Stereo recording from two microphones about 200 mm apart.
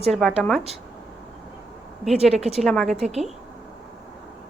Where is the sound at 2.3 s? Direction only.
30° right (ahead or behind).